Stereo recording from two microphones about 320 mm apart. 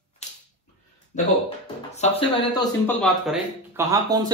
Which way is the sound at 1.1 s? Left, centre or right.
Left.